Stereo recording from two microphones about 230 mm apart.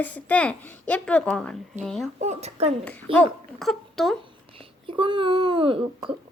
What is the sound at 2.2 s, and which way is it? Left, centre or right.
Speech, right.